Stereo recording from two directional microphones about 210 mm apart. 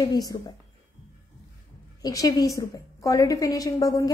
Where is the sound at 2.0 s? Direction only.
15° left (ahead or behind).